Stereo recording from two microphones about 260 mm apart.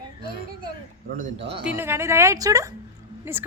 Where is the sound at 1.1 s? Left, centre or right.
Right.